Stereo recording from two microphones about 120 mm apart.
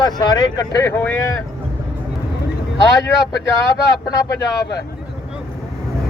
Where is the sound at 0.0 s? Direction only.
35° left (ahead or behind).